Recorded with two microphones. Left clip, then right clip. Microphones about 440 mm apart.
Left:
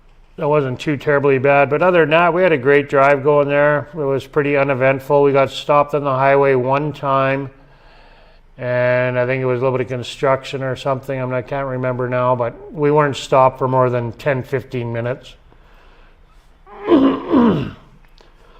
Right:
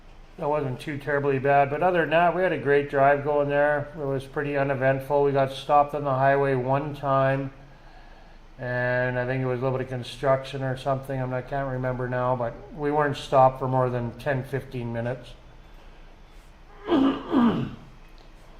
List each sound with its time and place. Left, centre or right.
0.3 s a man's voice: left
8.6 s a man's voice: left
16.8 s a sound: left